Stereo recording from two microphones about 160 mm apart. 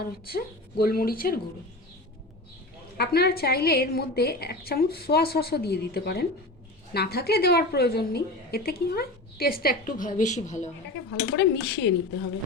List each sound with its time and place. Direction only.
0.0 s a woman's voice: 70° left (ahead or behind)
3.0 s a woman's voice: 75° left (ahead or behind); by 10.7 s 45° left (ahead or behind)
11.3 s speech: 90° left